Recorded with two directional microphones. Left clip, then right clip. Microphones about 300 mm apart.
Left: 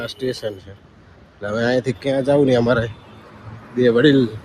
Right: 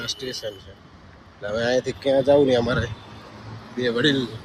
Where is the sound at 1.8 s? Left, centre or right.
Left.